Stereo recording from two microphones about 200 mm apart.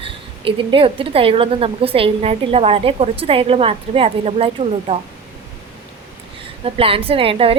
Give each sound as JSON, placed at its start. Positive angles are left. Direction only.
{"t": 0.0, "sound": "a woman's voice", "side_deg": -25}
{"t": 6.7, "sound": "a woman's voice", "side_deg": -30}